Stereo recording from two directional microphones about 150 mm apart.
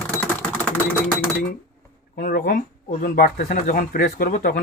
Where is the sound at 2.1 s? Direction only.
90° left.